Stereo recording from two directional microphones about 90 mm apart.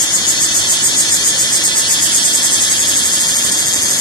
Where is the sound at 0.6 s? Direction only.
55° left (ahead or behind).